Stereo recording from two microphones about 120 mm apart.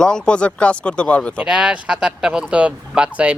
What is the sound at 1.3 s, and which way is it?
Speech, 5° right (ahead or behind).